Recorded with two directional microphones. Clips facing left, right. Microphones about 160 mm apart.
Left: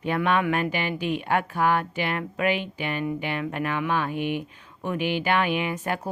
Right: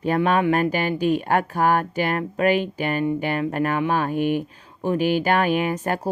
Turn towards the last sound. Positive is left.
turn(degrees=-40)  # may be behind; listen again after turning